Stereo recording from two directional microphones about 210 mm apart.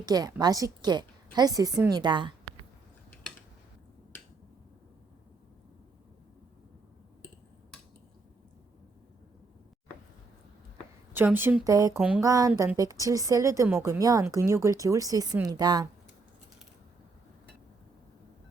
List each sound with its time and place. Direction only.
0.0 s a woman's voice: 20° right (ahead or behind)
11.1 s a woman's voice: 10° right (ahead or behind)
11.9 s a sound: 5° right (ahead or behind)
12.2 s a woman's voice: 15° right (ahead or behind)